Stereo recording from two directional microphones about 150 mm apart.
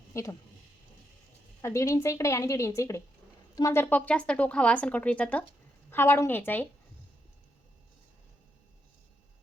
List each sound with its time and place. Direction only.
0.1 s speech: 20° left (ahead or behind)
1.6 s a woman's voice: 20° left (ahead or behind)